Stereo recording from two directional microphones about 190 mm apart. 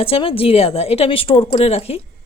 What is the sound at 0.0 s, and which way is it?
A woman's voice, 30° left (ahead or behind).